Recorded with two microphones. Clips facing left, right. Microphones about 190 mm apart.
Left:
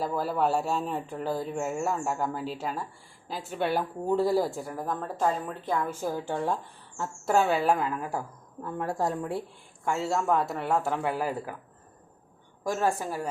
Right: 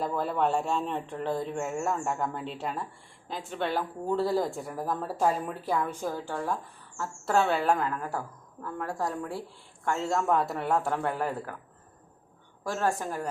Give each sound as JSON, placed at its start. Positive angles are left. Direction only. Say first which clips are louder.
{"t": 0.0, "sound": "speech", "louder": "left 1 dB", "side_deg": 5}
{"t": 7.3, "sound": "a woman's voice", "louder": "left 1 dB", "side_deg": 10}
{"t": 8.6, "sound": "speech", "louder": "left 3 dB", "side_deg": 25}
{"t": 9.8, "sound": "speech", "louder": "even", "side_deg": 5}
{"t": 12.6, "sound": "a woman's voice", "louder": "left 2 dB", "side_deg": 10}